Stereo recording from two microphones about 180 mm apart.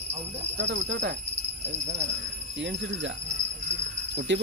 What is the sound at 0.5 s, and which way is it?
Speech, 85° right.